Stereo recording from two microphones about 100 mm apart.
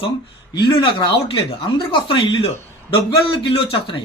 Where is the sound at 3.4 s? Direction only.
60° left (ahead or behind).